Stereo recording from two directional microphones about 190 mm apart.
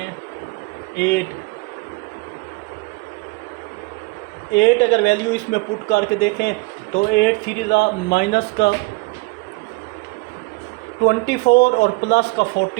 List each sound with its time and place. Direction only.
0.9 s speech: 60° left (ahead or behind)
4.5 s speech: 60° left (ahead or behind)
11.0 s speech: 60° left (ahead or behind)